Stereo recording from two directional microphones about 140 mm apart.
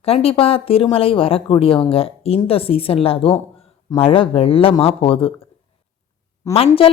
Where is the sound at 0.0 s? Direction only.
45° left (ahead or behind).